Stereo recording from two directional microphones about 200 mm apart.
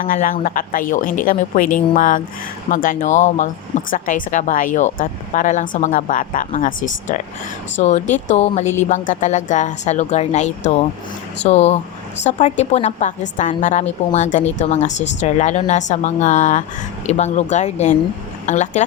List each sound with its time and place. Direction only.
0.0 s a woman's voice: 45° left (ahead or behind)